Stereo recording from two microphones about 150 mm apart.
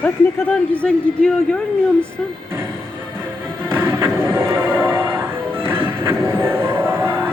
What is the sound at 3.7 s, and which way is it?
Music, 15° right (ahead or behind).